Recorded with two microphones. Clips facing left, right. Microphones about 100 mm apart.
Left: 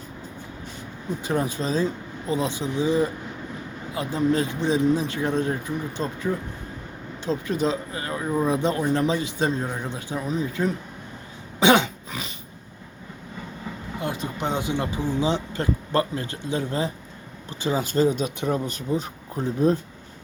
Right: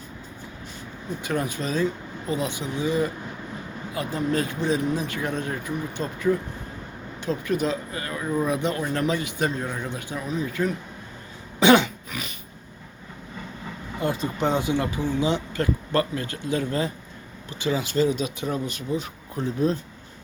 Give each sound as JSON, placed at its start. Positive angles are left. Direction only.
{"t": 1.2, "sound": "speech", "side_deg": 30}
{"t": 6.3, "sound": "speech", "side_deg": 10}
{"t": 7.3, "sound": "speech", "side_deg": 25}
{"t": 11.6, "sound": "cough", "side_deg": 20}
{"t": 14.1, "sound": "speech", "side_deg": 15}
{"t": 17.6, "sound": "speech", "side_deg": 35}